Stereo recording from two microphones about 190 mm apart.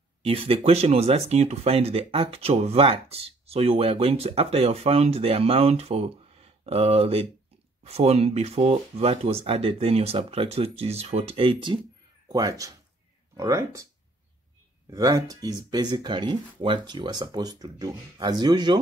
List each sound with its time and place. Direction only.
0.2 s speech: 30° right (ahead or behind)
14.9 s speech: 15° right (ahead or behind)